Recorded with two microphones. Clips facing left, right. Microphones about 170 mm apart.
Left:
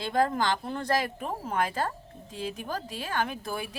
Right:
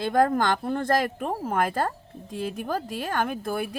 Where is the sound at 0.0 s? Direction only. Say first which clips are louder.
Right 4 dB; 50° right (ahead or behind).